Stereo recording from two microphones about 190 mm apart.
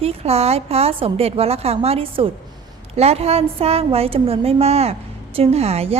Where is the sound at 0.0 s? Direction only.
30° right (ahead or behind).